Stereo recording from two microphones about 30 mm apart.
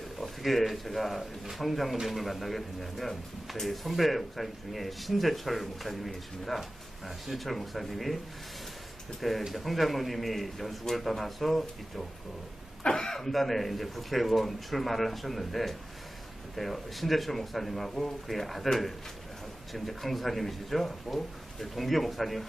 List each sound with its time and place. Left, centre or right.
0.2 s speech: centre
9.5 s speech: centre
12.8 s a sound: left
13.3 s speech: centre